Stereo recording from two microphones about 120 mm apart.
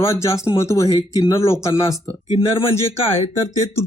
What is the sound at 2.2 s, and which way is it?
Speech, 55° left (ahead or behind).